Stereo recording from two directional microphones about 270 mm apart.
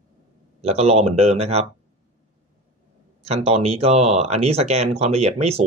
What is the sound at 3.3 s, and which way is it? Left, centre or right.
Speech, right.